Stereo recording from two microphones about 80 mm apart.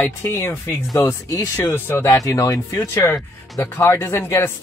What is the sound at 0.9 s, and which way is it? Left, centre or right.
Speech, left.